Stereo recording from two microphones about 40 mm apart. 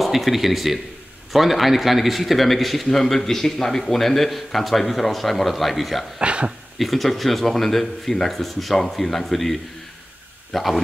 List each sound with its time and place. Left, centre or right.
0.0 s a man's voice: centre
6.1 s speech: right
6.8 s a man's voice: centre